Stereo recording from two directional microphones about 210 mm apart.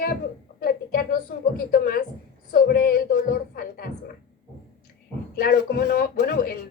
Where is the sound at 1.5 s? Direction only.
45° left (ahead or behind).